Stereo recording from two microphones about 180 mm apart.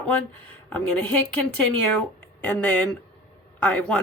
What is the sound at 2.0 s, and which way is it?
Speech, 10° left (ahead or behind).